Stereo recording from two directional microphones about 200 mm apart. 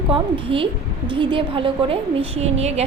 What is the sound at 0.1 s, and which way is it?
A woman's voice, 25° right (ahead or behind).